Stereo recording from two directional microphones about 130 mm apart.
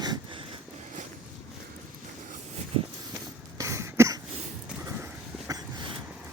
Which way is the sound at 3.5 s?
25° right (ahead or behind).